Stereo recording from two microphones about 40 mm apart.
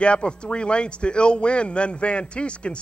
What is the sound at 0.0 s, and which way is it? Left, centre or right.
A man's voice, left.